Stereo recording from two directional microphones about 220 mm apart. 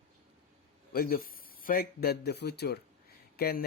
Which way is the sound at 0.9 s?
40° left (ahead or behind).